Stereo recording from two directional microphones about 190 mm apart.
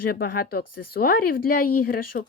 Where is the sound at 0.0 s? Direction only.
50° left (ahead or behind).